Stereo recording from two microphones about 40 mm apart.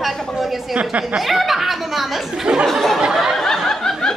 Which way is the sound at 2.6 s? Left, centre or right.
Centre.